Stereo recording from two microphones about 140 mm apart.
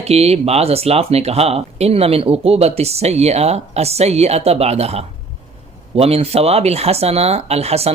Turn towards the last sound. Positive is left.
turn(degrees=-45)  # may be behind; listen again after turning